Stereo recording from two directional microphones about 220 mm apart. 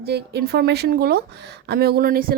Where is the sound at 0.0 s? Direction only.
45° right (ahead or behind).